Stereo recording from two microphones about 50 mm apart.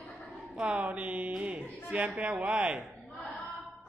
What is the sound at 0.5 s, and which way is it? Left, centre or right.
Speech, right.